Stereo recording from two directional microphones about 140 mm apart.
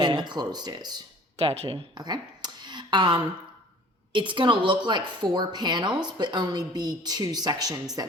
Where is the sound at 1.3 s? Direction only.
45° right (ahead or behind).